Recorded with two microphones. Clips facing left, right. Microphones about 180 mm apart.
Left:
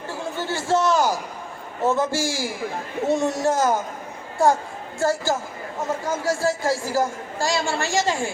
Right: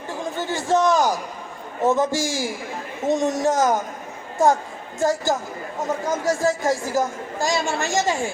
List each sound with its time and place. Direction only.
0.1 s chatter: 15° right (ahead or behind)
1.8 s a woman's voice: 15° right (ahead or behind)
4.9 s a woman's voice: 15° right (ahead or behind)